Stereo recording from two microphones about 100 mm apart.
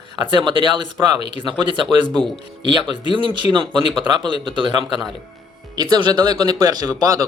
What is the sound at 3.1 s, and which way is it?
Speech, 55° right (ahead or behind).